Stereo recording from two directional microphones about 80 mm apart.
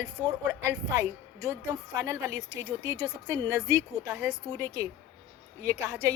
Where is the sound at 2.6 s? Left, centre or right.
Right.